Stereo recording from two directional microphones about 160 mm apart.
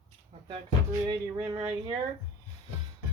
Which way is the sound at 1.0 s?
25° right (ahead or behind).